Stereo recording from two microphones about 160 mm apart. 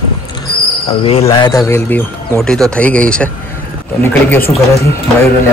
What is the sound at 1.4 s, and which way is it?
Speech, 20° left (ahead or behind).